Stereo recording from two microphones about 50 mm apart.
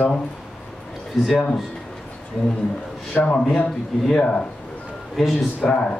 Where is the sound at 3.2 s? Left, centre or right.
Left.